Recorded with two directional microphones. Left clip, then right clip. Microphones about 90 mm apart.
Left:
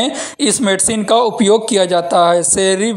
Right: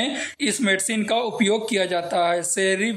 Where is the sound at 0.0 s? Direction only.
55° left (ahead or behind).